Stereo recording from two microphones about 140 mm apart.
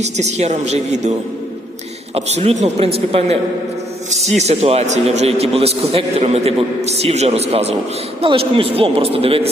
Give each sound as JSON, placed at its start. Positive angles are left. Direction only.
{"t": 0.0, "sound": "a man's voice", "side_deg": -55}
{"t": 2.1, "sound": "a man's voice", "side_deg": -50}
{"t": 4.4, "sound": "a man's voice", "side_deg": -50}